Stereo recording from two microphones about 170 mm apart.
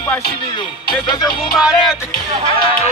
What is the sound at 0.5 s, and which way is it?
Music, 25° left (ahead or behind).